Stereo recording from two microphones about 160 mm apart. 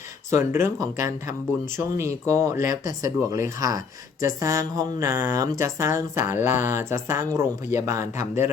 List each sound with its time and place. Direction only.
0.3 s a woman's voice: 15° right (ahead or behind)